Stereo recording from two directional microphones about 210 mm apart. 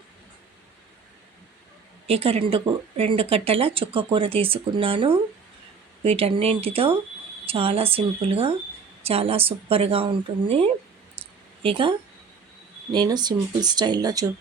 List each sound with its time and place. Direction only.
2.0 s speech: 30° right (ahead or behind)